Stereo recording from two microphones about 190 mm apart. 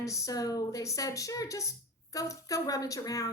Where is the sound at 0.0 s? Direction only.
15° left (ahead or behind).